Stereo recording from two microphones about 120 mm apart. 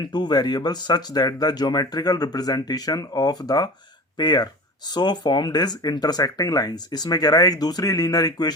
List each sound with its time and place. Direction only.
0.1 s speech: 35° left (ahead or behind)